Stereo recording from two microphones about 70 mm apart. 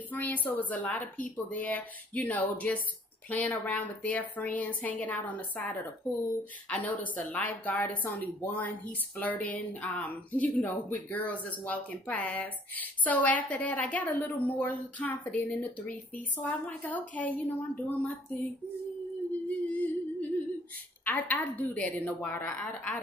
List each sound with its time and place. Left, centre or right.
0.1 s speech: left
19.7 s yodeling: left
21.0 s speech: left